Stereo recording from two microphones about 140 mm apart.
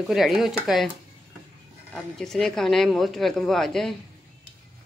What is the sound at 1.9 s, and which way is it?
Speech, 5° left (ahead or behind).